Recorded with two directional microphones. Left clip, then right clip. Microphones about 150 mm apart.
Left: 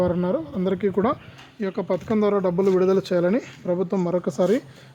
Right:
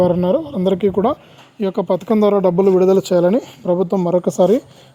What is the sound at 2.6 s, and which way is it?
Speech, 30° right (ahead or behind).